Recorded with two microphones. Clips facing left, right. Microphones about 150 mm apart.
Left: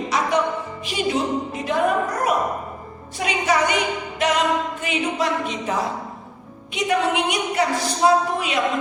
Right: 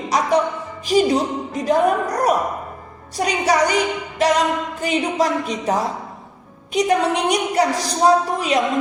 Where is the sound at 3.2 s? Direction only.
40° right (ahead or behind).